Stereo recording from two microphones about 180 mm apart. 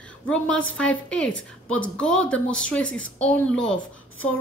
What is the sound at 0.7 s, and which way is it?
A woman's voice, 5° left (ahead or behind).